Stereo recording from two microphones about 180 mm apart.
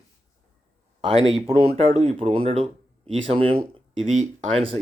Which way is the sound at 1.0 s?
30° right (ahead or behind).